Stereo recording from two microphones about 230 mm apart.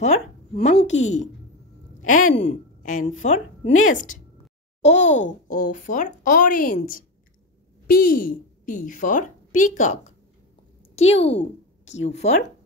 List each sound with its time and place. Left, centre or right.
0.0 s a woman's voice: left
2.0 s a woman's voice: left